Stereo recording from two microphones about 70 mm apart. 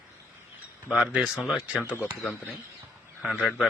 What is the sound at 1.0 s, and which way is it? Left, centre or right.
Speech, centre.